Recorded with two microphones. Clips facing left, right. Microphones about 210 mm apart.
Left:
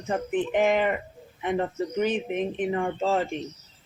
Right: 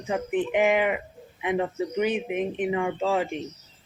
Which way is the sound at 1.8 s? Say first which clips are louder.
Even; 15° right (ahead or behind).